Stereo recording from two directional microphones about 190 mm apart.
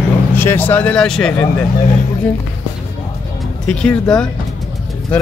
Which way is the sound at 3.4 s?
5° left (ahead or behind).